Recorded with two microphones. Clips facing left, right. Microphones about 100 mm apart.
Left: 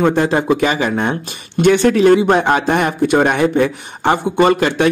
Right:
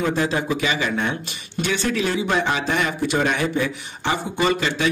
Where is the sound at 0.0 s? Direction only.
55° left (ahead or behind).